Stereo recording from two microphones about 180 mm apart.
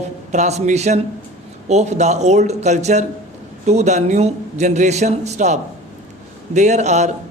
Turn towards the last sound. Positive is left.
turn(degrees=-40)  # may be behind; listen again after turning